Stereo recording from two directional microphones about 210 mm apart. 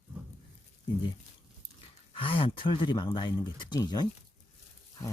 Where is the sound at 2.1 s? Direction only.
25° left (ahead or behind).